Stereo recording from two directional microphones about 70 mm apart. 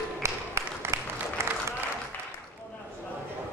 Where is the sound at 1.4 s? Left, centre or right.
Right.